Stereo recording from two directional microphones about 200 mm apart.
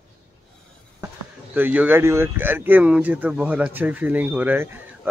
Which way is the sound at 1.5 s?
10° right (ahead or behind).